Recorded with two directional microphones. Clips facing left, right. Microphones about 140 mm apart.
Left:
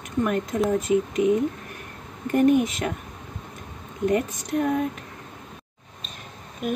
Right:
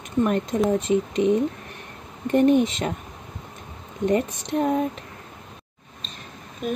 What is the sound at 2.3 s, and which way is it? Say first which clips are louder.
Speech: right 1 dB; 25° right (ahead or behind).